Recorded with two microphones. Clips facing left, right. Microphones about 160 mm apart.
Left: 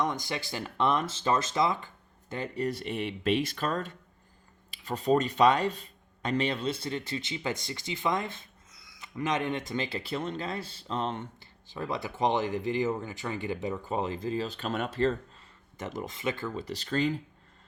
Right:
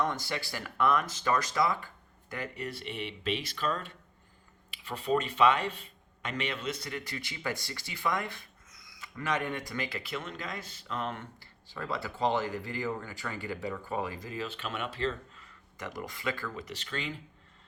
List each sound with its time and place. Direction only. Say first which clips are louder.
0.0 s speech: left 1 dB; 20° left (ahead or behind)
2.6 s speech: left 6 dB; 45° left (ahead or behind)
15.4 s speech: left 3 dB; 25° left (ahead or behind)